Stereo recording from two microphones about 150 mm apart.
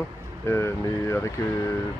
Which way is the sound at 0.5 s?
20° left (ahead or behind).